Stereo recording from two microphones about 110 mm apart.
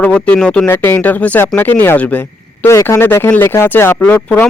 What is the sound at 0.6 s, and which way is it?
Speech, 20° left (ahead or behind).